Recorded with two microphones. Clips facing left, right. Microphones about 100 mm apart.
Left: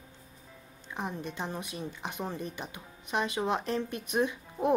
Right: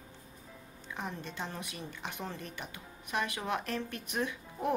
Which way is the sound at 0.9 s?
20° left (ahead or behind).